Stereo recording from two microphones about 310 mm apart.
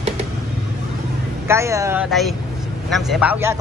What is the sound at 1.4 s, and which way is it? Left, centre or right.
Speech, centre.